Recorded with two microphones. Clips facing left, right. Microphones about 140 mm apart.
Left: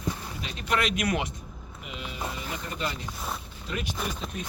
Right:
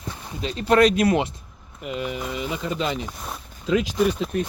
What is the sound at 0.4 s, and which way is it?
Speech, 35° right (ahead or behind).